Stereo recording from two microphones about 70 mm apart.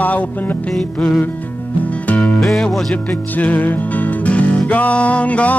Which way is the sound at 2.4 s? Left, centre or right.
Centre.